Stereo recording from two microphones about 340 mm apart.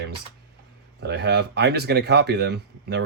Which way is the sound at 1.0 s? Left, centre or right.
Right.